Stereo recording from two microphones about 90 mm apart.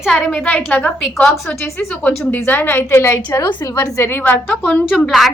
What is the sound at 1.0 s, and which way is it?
Speech, 5° left (ahead or behind).